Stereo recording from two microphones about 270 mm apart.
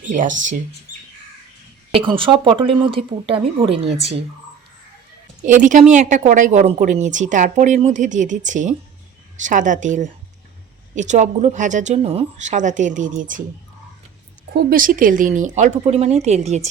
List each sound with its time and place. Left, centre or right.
0.0 s a woman's voice: right
0.9 s bird: centre
1.9 s a woman's voice: centre
5.4 s a woman's voice: right
14.5 s a woman's voice: right